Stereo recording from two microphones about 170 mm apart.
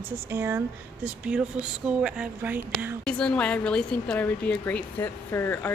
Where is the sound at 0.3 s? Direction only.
15° right (ahead or behind).